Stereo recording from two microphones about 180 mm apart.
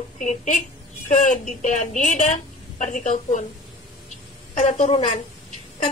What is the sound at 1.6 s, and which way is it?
A woman's voice, 40° left (ahead or behind).